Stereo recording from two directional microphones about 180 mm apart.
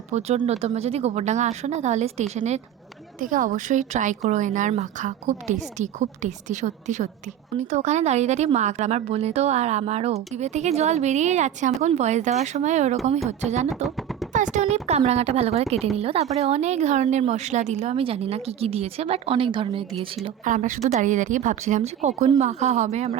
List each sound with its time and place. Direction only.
0.1 s a woman's voice: 35° right (ahead or behind)
3.2 s a woman's voice: 45° right (ahead or behind)
13.8 s a sound: centre (ahead or behind)
14.3 s a woman's voice: 45° right (ahead or behind)
20.4 s a woman's voice: 45° right (ahead or behind)